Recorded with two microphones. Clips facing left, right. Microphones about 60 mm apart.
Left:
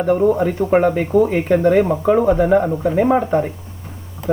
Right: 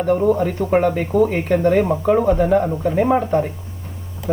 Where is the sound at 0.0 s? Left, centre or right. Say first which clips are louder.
Left 1 dB; centre.